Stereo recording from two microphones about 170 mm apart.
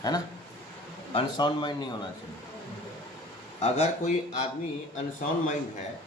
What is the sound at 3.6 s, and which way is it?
Speech, 40° left (ahead or behind).